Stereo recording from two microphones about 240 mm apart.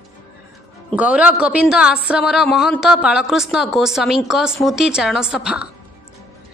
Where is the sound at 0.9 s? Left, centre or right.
Centre.